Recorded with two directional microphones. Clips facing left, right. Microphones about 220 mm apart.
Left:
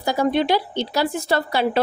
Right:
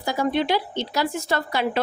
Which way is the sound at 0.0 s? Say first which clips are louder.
Left 3 dB; 35° left (ahead or behind).